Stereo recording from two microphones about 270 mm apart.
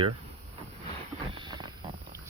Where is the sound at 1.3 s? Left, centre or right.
Centre.